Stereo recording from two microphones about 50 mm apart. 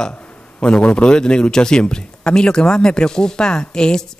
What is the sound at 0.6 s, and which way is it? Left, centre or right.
A man's voice, centre.